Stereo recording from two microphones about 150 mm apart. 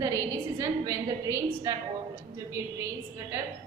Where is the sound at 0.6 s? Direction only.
20° right (ahead or behind).